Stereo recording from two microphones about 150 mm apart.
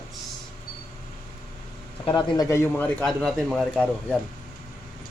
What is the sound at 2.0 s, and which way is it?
Speech, 30° left (ahead or behind).